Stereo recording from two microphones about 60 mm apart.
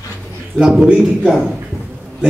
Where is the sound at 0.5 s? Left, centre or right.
Centre.